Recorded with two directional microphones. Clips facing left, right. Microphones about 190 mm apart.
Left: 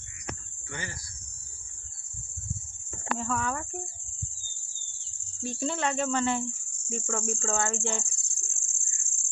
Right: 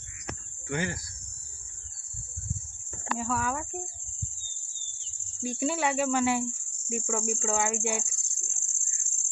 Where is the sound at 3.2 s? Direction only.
5° right (ahead or behind).